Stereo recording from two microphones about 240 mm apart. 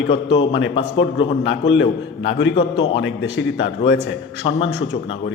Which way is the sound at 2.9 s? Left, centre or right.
Left.